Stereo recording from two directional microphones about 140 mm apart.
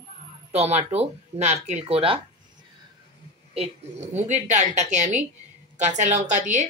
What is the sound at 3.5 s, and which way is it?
Speech, 50° right (ahead or behind).